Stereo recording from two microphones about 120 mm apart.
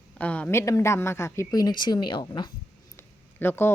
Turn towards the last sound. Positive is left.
turn(degrees=20)  # may be behind; listen again after turning